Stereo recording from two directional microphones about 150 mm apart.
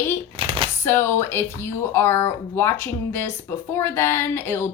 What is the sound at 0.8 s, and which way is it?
Speech, 15° left (ahead or behind).